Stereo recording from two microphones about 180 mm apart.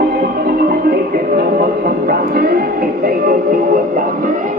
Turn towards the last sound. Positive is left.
turn(degrees=-45)  # may be behind; listen again after turning